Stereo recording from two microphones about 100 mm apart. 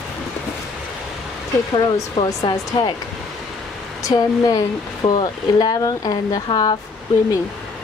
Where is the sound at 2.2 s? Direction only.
50° left (ahead or behind).